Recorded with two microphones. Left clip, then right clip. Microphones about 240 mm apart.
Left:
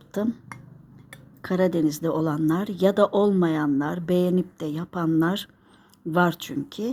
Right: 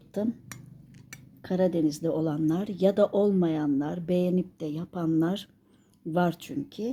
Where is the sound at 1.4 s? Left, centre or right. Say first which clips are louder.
Left 3 dB; centre.